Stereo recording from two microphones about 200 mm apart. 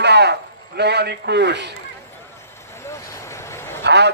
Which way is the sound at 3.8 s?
60° right (ahead or behind).